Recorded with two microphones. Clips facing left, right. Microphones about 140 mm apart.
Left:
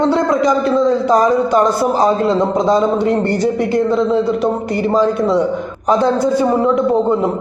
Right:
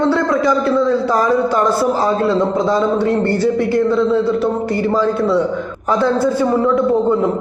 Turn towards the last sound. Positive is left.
turn(degrees=15)  # may be behind; listen again after turning